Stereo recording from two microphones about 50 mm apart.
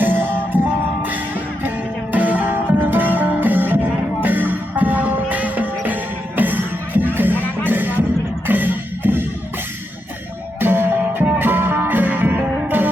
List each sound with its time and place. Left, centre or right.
0.0 s music: right
2.1 s music: right
10.6 s music: right